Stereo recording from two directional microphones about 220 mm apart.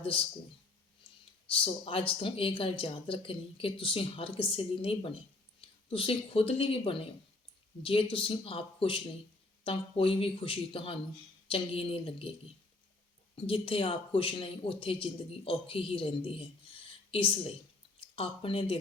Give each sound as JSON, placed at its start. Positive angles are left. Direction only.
{"t": 0.0, "sound": "speech", "side_deg": 25}
{"t": 1.5, "sound": "speech", "side_deg": 25}
{"t": 13.3, "sound": "speech", "side_deg": 25}
{"t": 18.1, "sound": "speech", "side_deg": 25}